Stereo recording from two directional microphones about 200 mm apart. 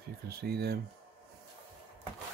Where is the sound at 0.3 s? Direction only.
50° right (ahead or behind).